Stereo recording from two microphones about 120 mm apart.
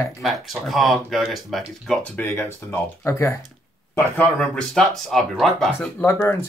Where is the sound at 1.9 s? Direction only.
10° left (ahead or behind).